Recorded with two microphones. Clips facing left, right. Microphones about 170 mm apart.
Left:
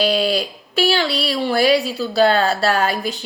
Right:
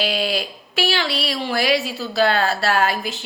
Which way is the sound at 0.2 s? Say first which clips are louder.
Left 4 dB; 35° left (ahead or behind).